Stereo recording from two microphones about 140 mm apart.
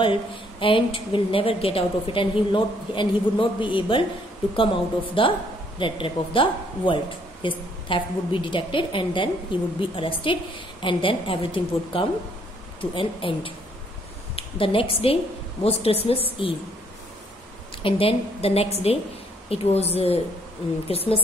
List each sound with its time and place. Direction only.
0.6 s a woman's voice: 40° left (ahead or behind)
5.2 s a woman's voice: 40° left (ahead or behind)
17.8 s a woman's voice: 40° left (ahead or behind)